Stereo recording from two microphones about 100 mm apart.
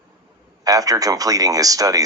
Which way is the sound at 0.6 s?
35° right (ahead or behind).